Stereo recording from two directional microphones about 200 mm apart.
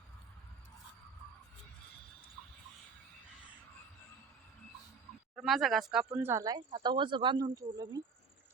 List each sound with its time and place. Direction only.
5.4 s speech: centre (ahead or behind); by 8.0 s 20° right (ahead or behind)